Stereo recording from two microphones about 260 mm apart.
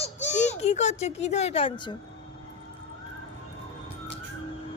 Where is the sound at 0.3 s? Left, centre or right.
Left.